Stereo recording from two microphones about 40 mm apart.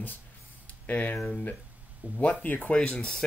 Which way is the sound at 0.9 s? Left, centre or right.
Left.